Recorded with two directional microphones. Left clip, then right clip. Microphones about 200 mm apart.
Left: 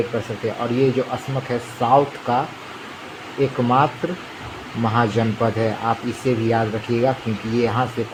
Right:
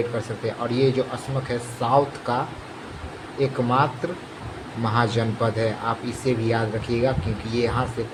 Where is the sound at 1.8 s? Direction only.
30° left (ahead or behind).